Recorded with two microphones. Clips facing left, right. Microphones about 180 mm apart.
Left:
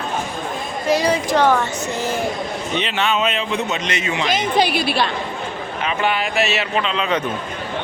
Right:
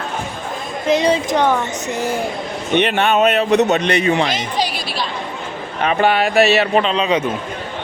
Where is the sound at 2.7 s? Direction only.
60° right (ahead or behind).